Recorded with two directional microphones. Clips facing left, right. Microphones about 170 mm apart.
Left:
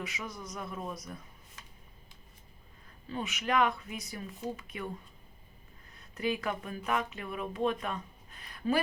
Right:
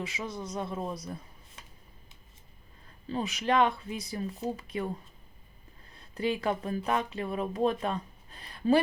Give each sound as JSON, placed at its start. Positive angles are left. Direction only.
{"t": 0.0, "sound": "speech", "side_deg": -30}
{"t": 3.1, "sound": "speech", "side_deg": -35}
{"t": 5.9, "sound": "speech", "side_deg": -30}